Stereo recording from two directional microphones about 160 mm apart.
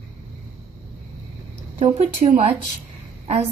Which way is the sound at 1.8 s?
45° right (ahead or behind).